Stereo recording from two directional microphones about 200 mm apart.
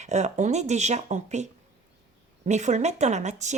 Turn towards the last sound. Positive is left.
turn(degrees=-35)  # may be behind; listen again after turning